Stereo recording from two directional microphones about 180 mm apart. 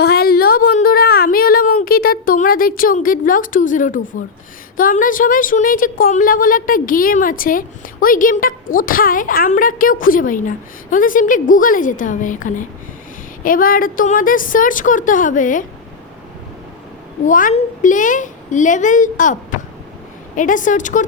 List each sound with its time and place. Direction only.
0.0 s a sound: 60° left (ahead or behind)
4.8 s a woman's voice: 50° left (ahead or behind)
17.2 s a woman's voice: 45° left (ahead or behind)